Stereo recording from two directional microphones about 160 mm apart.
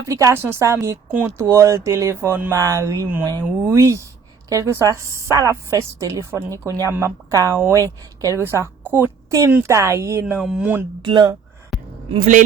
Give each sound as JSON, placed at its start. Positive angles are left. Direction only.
{"t": 0.0, "sound": "a woman's voice", "side_deg": -20}
{"t": 11.0, "sound": "speech", "side_deg": -30}
{"t": 11.7, "sound": "a sound", "side_deg": 0}
{"t": 12.1, "sound": "speech", "side_deg": -45}